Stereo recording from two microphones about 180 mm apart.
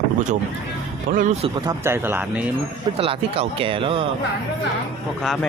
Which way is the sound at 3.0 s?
35° right (ahead or behind).